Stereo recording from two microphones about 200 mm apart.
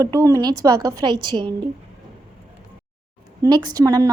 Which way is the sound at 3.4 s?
20° right (ahead or behind).